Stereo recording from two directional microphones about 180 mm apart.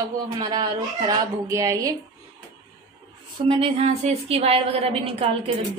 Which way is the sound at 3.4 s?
30° right (ahead or behind).